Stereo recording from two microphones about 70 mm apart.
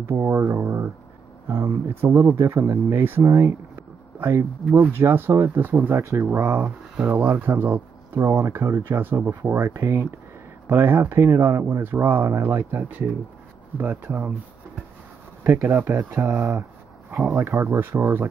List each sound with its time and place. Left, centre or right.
0.1 s speech: right
5.9 s speech: right
7.1 s speech: right
15.4 s speech: right